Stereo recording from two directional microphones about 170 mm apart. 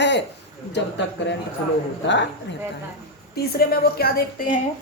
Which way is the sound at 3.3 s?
65° left (ahead or behind).